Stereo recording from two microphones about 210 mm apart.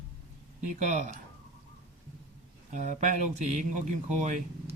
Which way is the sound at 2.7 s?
35° right (ahead or behind).